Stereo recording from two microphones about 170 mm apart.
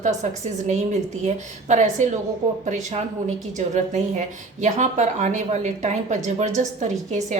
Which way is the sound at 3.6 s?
45° right (ahead or behind).